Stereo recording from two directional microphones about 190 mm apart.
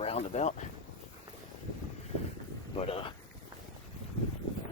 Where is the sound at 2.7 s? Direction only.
30° left (ahead or behind).